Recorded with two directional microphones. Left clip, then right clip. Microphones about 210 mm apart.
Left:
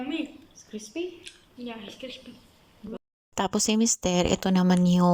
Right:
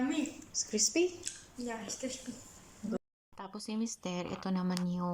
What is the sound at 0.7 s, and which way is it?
Speech, 5° right (ahead or behind).